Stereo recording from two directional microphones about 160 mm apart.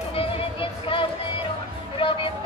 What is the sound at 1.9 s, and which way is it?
Music, 30° left (ahead or behind).